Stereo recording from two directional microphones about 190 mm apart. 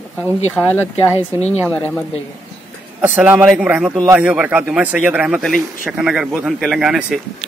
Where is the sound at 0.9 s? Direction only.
35° left (ahead or behind).